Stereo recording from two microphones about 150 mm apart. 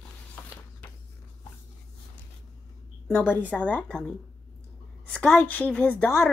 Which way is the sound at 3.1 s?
10° left (ahead or behind).